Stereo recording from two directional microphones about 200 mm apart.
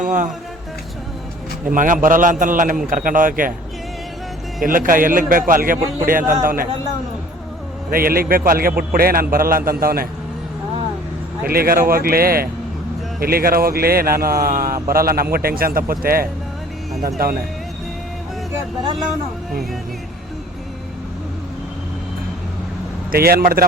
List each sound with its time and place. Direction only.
0.0 s a man's voice: 40° right (ahead or behind)
1.7 s a man's voice: 40° right (ahead or behind)
4.6 s a man's voice: 45° right (ahead or behind)
7.9 s a man's voice: 45° right (ahead or behind)
11.4 s a man's voice: 50° right (ahead or behind)
23.1 s a man's voice: 50° right (ahead or behind)